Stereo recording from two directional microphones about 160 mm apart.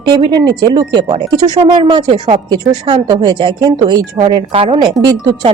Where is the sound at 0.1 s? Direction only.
30° right (ahead or behind).